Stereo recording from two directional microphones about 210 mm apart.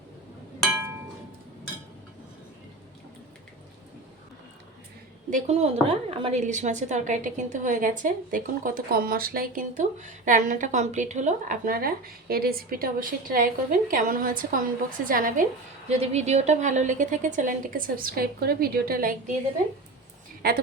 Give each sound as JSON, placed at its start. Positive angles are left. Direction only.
{"t": 5.3, "sound": "a woman's voice", "side_deg": -30}
{"t": 20.4, "sound": "a woman's voice", "side_deg": -50}